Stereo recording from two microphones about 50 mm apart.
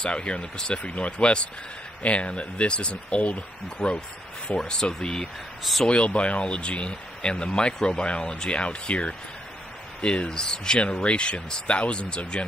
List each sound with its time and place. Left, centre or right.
0.0 s speech: left
4.5 s speech: centre
5.6 s a man's voice: centre
5.9 s speech: left